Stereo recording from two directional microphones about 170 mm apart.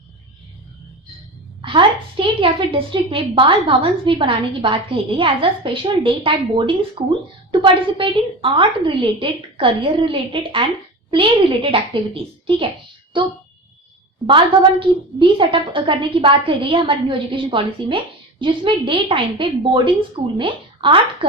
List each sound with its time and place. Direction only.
1.6 s a woman's voice: 30° right (ahead or behind)